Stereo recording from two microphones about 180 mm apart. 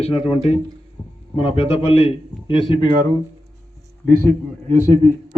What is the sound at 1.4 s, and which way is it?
A man's voice, 30° left (ahead or behind).